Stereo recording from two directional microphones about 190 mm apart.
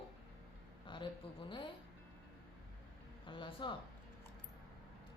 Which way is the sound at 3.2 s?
25° left (ahead or behind).